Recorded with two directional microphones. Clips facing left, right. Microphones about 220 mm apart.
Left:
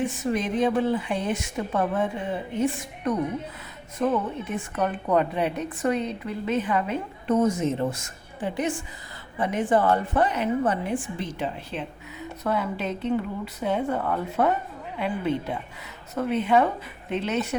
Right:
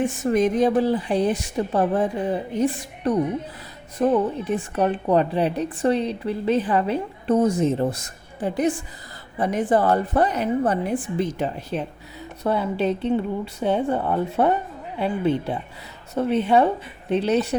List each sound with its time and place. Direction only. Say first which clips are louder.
0.0 s a woman's voice: right 6 dB; 50° right (ahead or behind)
12.4 s a woman's voice: right 5 dB; 30° right (ahead or behind)